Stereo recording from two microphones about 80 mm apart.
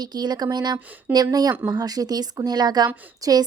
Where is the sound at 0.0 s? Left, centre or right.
Right.